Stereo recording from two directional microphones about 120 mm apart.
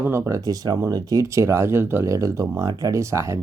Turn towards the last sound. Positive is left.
turn(degrees=-25)  # may be behind; listen again after turning